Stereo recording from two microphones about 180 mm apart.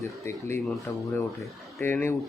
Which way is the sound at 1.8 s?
10° left (ahead or behind).